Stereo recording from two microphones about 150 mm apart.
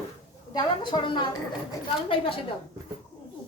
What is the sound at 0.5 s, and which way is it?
A woman's voice, 30° left (ahead or behind).